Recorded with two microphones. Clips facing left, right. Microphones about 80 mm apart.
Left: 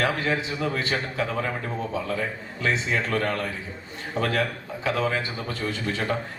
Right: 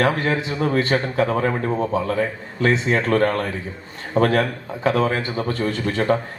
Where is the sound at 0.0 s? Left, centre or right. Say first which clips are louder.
Right 5 dB; right.